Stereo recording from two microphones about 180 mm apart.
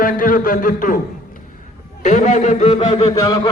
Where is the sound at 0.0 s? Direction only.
50° left (ahead or behind).